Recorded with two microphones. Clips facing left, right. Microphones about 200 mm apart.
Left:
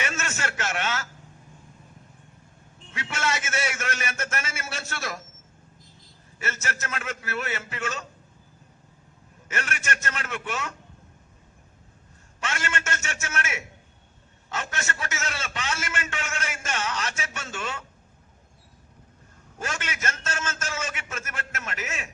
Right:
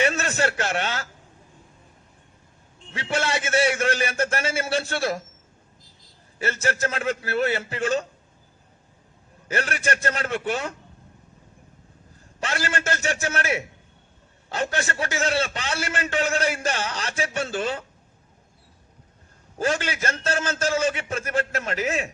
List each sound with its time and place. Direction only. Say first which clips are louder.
0.0 s a man's voice: right 8 dB; 35° right (ahead or behind)
2.9 s a man's voice: right 4 dB; 30° right (ahead or behind)
6.4 s a man's voice: right 8 dB; 30° right (ahead or behind)
9.5 s a man's voice: right 6 dB; 35° right (ahead or behind)
12.4 s a man's voice: right 4 dB; 35° right (ahead or behind)
19.5 s a man's voice: right 9 dB; 35° right (ahead or behind)